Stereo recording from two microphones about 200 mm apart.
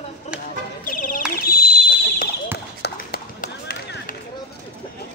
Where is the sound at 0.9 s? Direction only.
40° left (ahead or behind).